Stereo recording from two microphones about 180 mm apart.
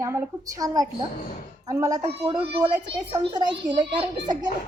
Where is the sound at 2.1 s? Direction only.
30° right (ahead or behind).